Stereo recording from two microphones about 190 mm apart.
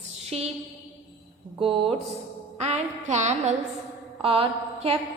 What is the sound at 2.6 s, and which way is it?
Speech, 35° right (ahead or behind).